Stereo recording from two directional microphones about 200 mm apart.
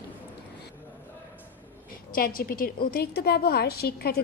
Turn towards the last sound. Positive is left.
turn(degrees=50)  # may be behind; listen again after turning